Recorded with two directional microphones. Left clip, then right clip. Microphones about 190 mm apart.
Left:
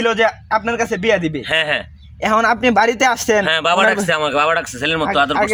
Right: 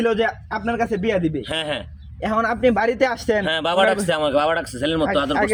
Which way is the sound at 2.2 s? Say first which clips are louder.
Left 5 dB; 25° left (ahead or behind).